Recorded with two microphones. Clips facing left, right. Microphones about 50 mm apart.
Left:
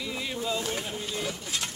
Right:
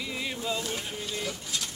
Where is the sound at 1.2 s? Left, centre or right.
Left.